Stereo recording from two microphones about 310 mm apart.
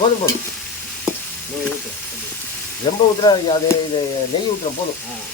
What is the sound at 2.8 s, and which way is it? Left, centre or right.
Speech, centre.